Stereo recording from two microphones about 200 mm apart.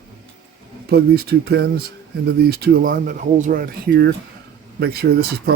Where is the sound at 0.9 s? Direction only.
50° right (ahead or behind).